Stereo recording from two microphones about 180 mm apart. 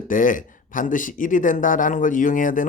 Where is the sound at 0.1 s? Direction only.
50° left (ahead or behind).